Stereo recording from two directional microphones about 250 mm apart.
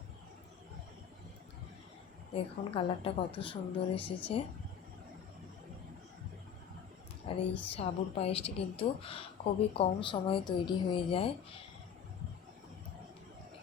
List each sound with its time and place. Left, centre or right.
2.3 s a woman's voice: left
7.7 s a woman's voice: left